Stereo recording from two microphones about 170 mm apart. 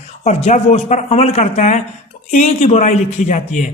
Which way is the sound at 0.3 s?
45° left (ahead or behind).